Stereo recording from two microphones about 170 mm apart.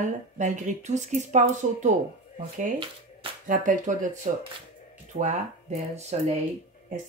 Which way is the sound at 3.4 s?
50° right (ahead or behind).